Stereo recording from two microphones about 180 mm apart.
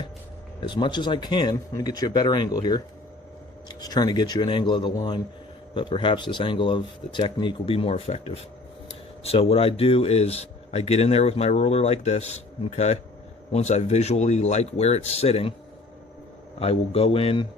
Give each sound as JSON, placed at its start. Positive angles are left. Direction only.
{"t": 0.7, "sound": "speech", "side_deg": 25}
{"t": 16.6, "sound": "speech", "side_deg": 30}